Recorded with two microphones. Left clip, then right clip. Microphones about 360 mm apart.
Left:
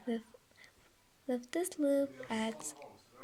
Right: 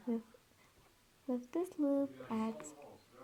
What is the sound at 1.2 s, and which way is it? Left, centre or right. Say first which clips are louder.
Speech: left 3 dB; left.